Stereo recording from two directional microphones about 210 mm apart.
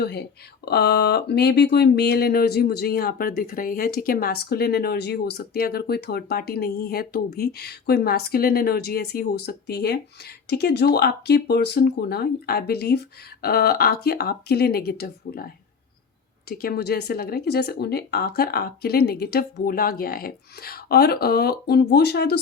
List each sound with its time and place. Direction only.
0.0 s speech: 50° left (ahead or behind)
16.5 s speech: 45° left (ahead or behind)